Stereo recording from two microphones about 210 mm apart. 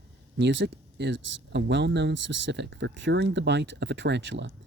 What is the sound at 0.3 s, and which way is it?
Speech, 55° right (ahead or behind).